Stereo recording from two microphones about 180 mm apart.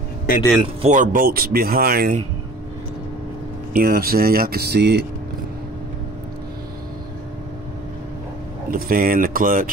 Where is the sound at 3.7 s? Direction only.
55° right (ahead or behind).